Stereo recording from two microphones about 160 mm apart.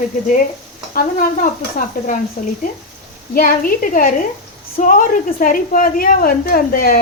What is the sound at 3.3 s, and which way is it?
A woman's voice, 60° left (ahead or behind).